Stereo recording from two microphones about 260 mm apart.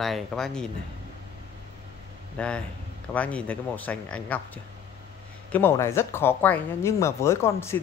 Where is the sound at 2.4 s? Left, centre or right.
Centre.